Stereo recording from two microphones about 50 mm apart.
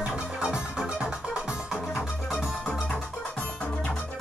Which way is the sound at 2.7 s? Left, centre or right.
Left.